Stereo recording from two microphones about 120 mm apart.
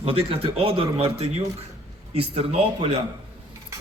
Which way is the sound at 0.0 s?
50° right (ahead or behind).